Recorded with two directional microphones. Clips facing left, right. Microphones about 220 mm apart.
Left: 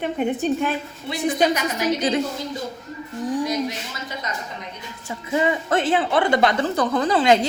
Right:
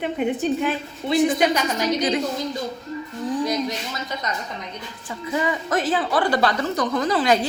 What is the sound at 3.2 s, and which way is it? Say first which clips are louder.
Speech: left 1 dB; 15° left (ahead or behind).